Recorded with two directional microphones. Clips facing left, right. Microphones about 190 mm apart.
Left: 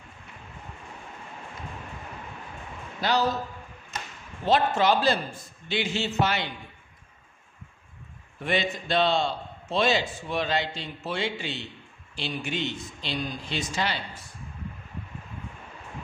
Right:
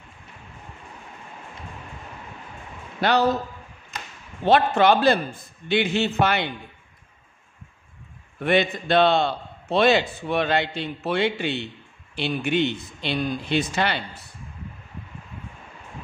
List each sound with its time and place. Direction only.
3.0 s a man's voice: 60° right (ahead or behind)
4.5 s a man's voice: 65° right (ahead or behind)
8.4 s a man's voice: 60° right (ahead or behind)